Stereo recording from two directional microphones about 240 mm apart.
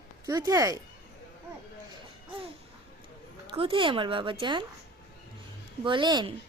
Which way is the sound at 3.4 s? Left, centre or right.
Right.